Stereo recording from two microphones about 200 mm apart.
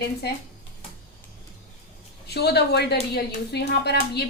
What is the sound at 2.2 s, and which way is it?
A woman's voice, 55° left (ahead or behind).